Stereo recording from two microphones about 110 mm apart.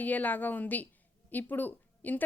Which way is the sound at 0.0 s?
15° left (ahead or behind).